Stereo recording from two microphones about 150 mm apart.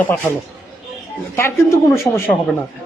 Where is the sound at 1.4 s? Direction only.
20° left (ahead or behind).